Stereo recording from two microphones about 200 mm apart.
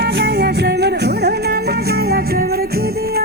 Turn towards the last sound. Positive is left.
turn(degrees=-50)  # may be behind; listen again after turning